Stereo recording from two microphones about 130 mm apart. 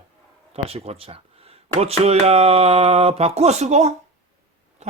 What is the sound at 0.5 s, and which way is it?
Speech, 50° right (ahead or behind).